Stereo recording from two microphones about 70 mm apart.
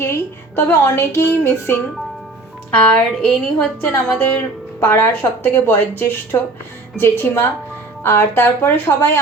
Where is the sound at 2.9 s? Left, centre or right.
Centre.